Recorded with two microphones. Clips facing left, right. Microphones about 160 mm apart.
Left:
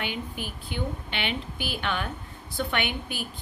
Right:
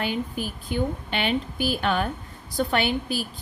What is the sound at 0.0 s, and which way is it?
A woman's voice, 40° right (ahead or behind).